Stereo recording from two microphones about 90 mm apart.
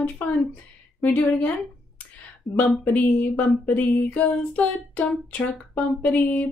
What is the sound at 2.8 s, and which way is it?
Speech, 20° left (ahead or behind).